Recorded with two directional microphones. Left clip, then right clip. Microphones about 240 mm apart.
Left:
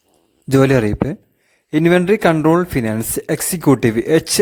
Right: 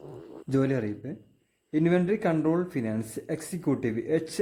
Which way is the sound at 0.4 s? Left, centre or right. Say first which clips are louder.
Left 14 dB; left.